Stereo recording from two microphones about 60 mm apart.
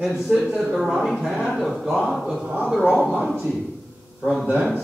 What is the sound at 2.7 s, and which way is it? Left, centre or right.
Speech, centre.